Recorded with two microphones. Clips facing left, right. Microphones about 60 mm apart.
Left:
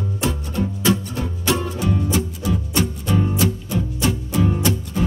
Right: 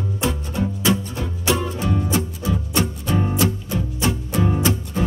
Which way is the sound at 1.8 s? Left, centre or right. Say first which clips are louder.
Left 1 dB; right.